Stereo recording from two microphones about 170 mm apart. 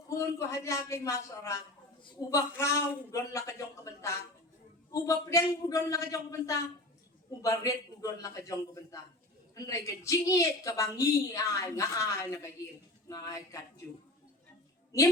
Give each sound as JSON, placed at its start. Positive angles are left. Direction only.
{"t": 0.1, "sound": "a woman's voice", "side_deg": 15}